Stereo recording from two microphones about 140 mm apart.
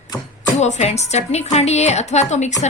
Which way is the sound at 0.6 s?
50° left (ahead or behind).